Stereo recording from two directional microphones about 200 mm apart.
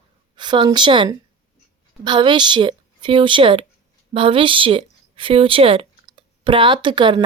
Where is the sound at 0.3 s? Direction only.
25° right (ahead or behind).